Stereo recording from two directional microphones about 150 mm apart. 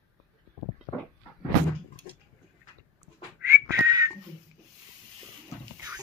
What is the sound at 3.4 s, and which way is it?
Whistling, 20° right (ahead or behind).